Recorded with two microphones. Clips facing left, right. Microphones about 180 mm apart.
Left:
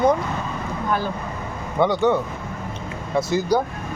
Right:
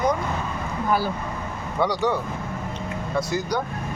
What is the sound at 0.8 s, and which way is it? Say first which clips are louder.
Speech: right 1 dB; 10° right (ahead or behind).